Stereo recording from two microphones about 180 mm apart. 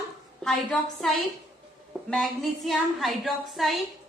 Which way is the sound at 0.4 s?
Centre (ahead or behind).